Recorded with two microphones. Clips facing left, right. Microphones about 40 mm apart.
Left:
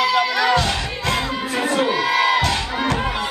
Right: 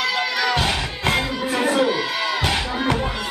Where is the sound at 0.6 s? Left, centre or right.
Right.